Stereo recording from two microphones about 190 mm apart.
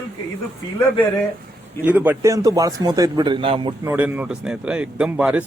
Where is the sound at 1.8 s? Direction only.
10° right (ahead or behind); by 3.7 s 25° right (ahead or behind).